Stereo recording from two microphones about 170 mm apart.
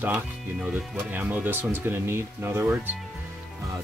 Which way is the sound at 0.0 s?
10° right (ahead or behind).